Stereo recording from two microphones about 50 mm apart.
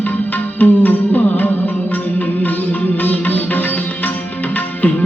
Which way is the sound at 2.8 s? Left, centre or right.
Left.